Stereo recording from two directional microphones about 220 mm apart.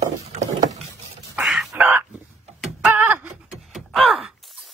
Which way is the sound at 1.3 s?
Centre (ahead or behind).